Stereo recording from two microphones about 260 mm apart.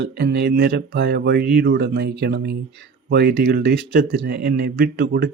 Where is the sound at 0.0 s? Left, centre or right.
Right.